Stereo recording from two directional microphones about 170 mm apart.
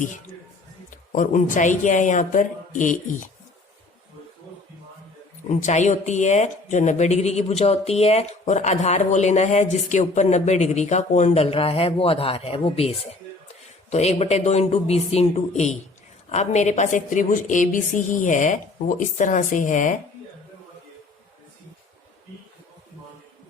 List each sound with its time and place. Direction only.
0.9 s speech: 50° left (ahead or behind)
5.5 s speech: 45° left (ahead or behind)
13.9 s a woman's voice: 40° left (ahead or behind)